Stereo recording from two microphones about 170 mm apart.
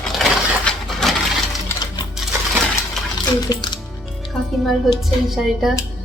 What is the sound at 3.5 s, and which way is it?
Speech, 25° left (ahead or behind).